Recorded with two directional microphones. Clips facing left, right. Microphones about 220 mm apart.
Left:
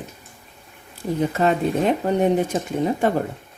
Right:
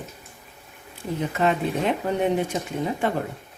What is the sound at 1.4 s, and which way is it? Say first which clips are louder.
Speech: left 2 dB; 40° left (ahead or behind).